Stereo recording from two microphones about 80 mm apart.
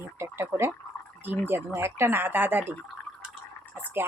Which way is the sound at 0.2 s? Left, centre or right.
Right.